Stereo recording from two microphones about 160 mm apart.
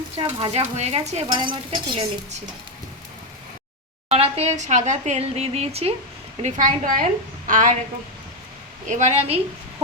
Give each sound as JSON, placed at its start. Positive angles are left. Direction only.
{"t": 0.2, "sound": "speech", "side_deg": -30}
{"t": 1.3, "sound": "speech", "side_deg": -30}
{"t": 4.1, "sound": "speech", "side_deg": -40}
{"t": 6.4, "sound": "a woman's voice", "side_deg": -55}
{"t": 8.9, "sound": "a woman's voice", "side_deg": -45}